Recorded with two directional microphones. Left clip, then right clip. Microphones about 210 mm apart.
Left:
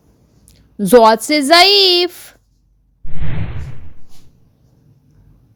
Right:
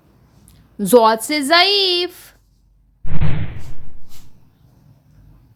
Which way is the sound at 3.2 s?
5° right (ahead or behind).